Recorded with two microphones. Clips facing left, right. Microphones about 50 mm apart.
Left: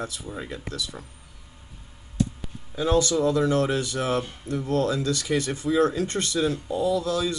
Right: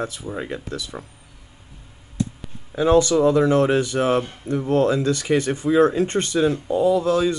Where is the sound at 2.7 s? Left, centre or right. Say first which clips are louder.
Right 6 dB; right.